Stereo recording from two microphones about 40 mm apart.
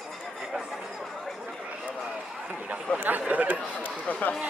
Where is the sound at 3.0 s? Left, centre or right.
Right.